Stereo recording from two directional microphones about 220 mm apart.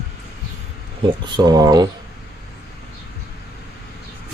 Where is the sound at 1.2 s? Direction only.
20° right (ahead or behind).